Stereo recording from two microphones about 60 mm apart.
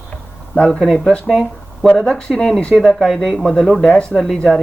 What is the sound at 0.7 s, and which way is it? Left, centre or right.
Speech, centre.